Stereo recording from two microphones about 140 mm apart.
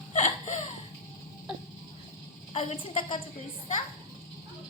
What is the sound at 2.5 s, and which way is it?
Speech, 45° left (ahead or behind).